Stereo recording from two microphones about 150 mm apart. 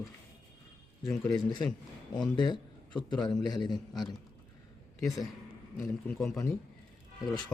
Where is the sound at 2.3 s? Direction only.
30° left (ahead or behind).